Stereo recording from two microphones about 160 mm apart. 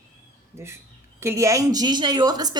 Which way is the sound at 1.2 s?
15° right (ahead or behind).